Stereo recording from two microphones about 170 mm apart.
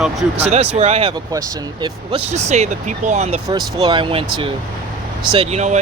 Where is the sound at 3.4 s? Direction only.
25° right (ahead or behind); by 5.7 s 40° right (ahead or behind).